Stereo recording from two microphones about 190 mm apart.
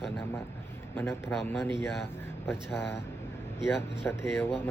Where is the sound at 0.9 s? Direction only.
15° left (ahead or behind).